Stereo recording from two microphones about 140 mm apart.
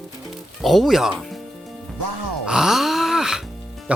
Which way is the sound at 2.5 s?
5° right (ahead or behind).